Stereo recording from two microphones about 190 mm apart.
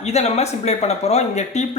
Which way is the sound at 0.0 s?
35° left (ahead or behind).